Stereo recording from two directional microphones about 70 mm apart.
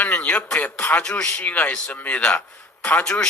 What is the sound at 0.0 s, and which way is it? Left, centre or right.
A man's voice, left.